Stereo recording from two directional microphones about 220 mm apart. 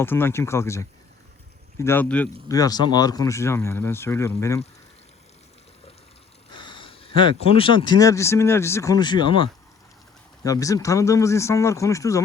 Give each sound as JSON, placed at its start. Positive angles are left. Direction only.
{"t": 0.0, "sound": "speech", "side_deg": 10}
{"t": 6.5, "sound": "speech", "side_deg": 20}